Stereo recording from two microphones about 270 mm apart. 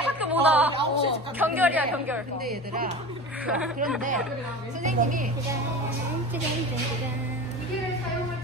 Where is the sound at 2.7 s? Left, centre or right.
Right.